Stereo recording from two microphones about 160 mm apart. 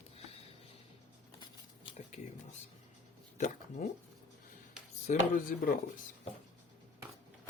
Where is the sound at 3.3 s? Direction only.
50° left (ahead or behind).